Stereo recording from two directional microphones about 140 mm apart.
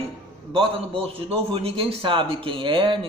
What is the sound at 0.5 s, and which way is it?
A man's voice, 40° right (ahead or behind).